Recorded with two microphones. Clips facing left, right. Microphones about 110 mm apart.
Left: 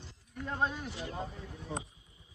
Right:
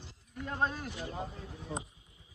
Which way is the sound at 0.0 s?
5° right (ahead or behind).